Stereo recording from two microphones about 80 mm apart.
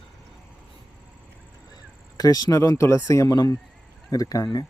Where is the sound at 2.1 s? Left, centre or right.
Left.